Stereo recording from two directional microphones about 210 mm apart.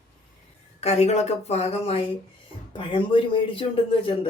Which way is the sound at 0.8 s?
30° left (ahead or behind).